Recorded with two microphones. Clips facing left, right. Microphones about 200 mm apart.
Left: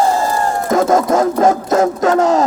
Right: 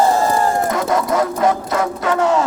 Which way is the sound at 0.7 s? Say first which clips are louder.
Left 5 dB; 45° left (ahead or behind).